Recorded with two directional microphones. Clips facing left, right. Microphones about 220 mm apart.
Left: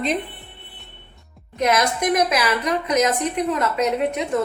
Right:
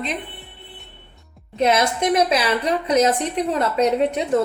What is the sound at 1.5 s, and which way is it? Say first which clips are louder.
A woman's voice: right 2 dB; 25° right (ahead or behind).